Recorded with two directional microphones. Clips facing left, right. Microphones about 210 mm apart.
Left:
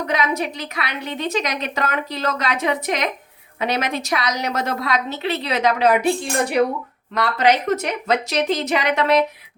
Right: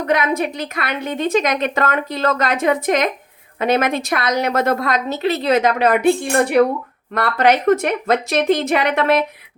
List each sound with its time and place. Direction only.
0.1 s a woman's voice: 55° right (ahead or behind)